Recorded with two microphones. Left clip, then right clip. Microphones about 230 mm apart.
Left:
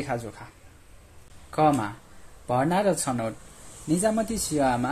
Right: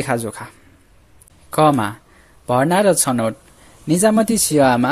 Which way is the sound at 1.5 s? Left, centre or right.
Right.